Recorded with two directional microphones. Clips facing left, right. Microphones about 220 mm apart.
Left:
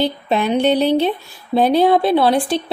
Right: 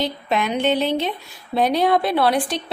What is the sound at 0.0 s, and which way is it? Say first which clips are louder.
A woman's voice: left 4 dB; 30° left (ahead or behind).